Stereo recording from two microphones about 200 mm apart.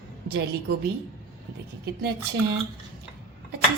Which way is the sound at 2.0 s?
55° right (ahead or behind).